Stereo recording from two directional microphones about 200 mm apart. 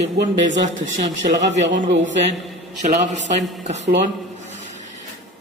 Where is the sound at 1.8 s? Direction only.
40° right (ahead or behind).